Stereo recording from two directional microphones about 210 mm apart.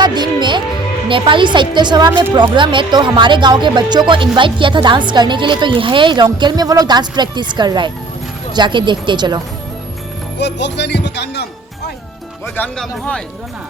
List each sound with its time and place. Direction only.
0.0 s music: 20° right (ahead or behind)
1.0 s a woman's voice: 25° right (ahead or behind)
10.3 s speech: 55° left (ahead or behind)
12.5 s speech: 5° left (ahead or behind)